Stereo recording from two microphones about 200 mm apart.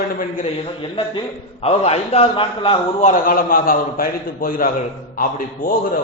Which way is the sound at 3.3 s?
45° left (ahead or behind).